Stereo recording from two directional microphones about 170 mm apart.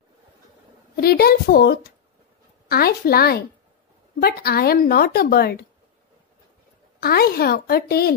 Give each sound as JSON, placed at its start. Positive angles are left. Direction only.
{"t": 0.9, "sound": "a woman's voice", "side_deg": 65}
{"t": 7.0, "sound": "a woman's voice", "side_deg": 65}